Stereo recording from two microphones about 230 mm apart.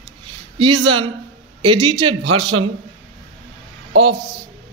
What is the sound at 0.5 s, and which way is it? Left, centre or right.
A man's voice, right.